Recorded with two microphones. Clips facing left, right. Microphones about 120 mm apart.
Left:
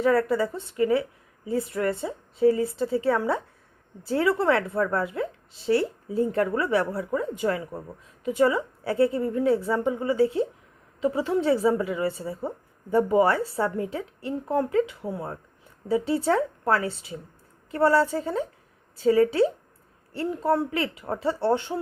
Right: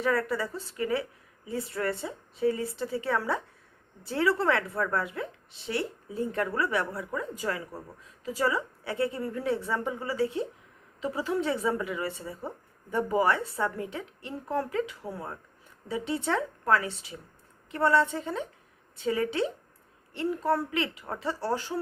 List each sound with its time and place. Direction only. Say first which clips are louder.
0.0 s a woman's voice: left 6 dB; 25° left (ahead or behind)